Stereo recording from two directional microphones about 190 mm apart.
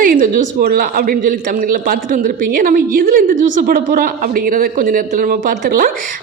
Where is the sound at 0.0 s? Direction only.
45° right (ahead or behind).